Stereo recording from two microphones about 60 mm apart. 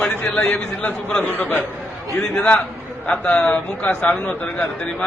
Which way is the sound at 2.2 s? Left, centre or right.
Centre.